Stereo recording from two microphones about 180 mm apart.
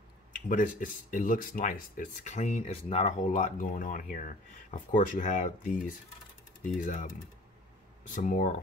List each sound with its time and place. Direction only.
0.5 s speech: 45° left (ahead or behind)
6.8 s speech: 45° left (ahead or behind)
8.1 s speech: 45° left (ahead or behind)